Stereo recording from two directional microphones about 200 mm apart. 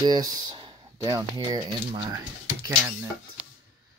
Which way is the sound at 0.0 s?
20° right (ahead or behind).